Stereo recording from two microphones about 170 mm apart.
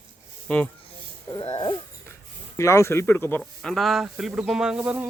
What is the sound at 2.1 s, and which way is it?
Speech, 15° left (ahead or behind).